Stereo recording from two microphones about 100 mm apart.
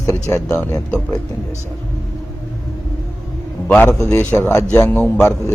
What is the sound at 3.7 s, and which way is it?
Speech, 20° left (ahead or behind).